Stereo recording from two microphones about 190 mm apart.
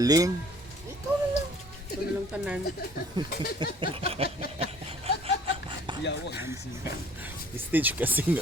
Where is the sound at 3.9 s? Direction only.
30° right (ahead or behind).